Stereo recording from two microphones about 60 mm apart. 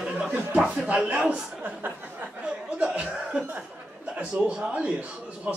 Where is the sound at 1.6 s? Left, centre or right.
Right.